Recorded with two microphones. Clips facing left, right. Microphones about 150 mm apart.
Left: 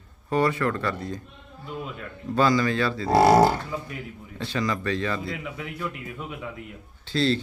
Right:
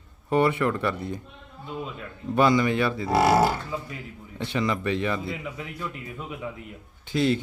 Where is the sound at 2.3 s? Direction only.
20° right (ahead or behind).